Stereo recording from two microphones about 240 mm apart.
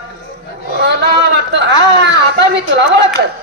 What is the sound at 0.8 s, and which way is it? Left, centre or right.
A man's voice, right.